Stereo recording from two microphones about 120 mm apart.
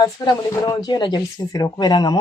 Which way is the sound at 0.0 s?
30° left (ahead or behind).